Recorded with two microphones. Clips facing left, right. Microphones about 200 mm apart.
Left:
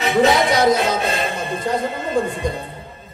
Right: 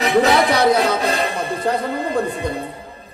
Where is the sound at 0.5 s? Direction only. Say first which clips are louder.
Right 1 dB; 60° right (ahead or behind).